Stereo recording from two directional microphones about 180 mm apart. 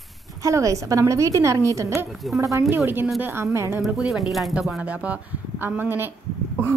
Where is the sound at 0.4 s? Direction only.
15° right (ahead or behind).